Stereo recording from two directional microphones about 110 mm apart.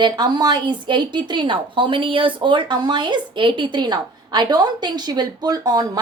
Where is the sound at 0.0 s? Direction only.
40° right (ahead or behind).